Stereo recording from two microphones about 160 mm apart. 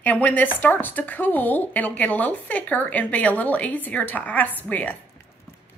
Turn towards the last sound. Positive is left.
turn(degrees=10)  # may be behind; listen again after turning